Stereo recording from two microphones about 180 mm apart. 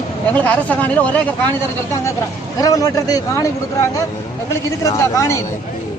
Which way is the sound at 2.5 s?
20° left (ahead or behind).